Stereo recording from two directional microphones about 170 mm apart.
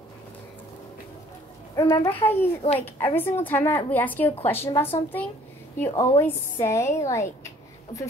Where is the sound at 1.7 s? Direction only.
25° left (ahead or behind).